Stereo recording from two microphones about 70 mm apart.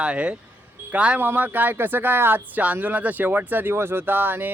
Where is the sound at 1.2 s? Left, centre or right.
Right.